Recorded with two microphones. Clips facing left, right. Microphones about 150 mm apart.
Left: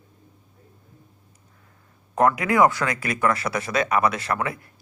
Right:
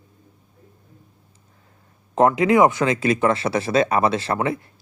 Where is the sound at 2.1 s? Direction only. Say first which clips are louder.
Right 4 dB; 25° right (ahead or behind).